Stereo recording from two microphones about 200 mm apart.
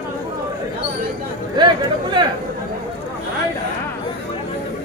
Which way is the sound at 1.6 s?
20° right (ahead or behind).